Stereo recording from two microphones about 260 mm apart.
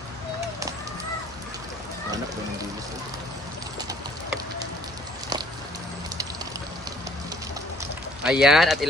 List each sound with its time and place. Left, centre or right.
8.2 s speech: centre